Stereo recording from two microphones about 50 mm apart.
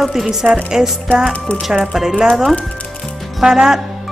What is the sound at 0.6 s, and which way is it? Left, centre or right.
Music, centre.